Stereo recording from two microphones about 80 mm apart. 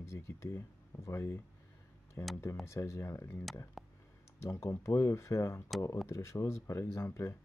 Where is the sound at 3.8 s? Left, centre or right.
Centre.